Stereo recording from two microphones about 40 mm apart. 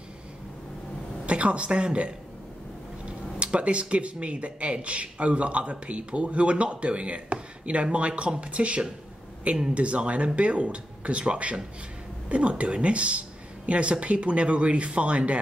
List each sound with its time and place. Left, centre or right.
1.2 s speech: right